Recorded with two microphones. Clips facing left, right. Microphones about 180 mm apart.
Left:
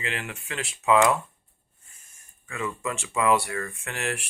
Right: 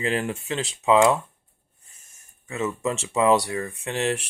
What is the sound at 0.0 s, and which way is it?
Speech, 35° right (ahead or behind).